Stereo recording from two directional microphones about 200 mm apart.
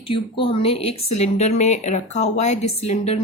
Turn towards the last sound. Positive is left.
turn(degrees=30)  # may be behind; listen again after turning